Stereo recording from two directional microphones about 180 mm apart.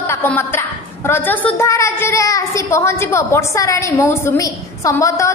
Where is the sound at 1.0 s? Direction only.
10° left (ahead or behind).